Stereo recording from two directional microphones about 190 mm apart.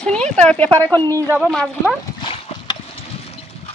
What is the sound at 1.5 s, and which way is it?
Speech, 5° left (ahead or behind).